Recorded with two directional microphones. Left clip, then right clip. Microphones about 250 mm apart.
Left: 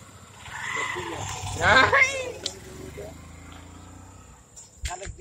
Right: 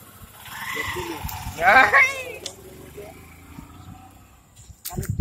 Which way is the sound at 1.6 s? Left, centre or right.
Centre.